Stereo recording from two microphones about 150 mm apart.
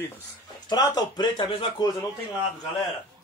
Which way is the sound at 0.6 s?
25° left (ahead or behind).